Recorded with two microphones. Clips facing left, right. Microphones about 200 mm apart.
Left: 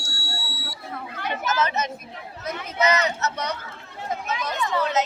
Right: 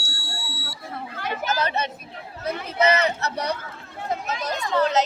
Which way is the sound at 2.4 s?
30° right (ahead or behind).